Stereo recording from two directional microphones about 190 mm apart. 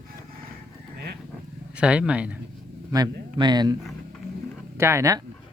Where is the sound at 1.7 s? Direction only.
5° right (ahead or behind).